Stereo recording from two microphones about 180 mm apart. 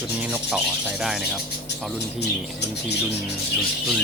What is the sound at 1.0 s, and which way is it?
Speech, centre (ahead or behind).